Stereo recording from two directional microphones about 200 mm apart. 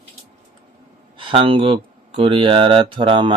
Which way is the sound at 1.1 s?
25° right (ahead or behind).